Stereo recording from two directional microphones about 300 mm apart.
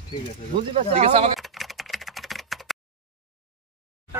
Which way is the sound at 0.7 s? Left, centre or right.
Centre.